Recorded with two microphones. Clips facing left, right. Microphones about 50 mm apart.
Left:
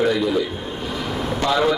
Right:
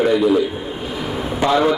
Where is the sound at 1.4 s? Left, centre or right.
Centre.